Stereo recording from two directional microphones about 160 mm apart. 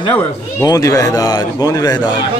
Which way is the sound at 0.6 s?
20° left (ahead or behind).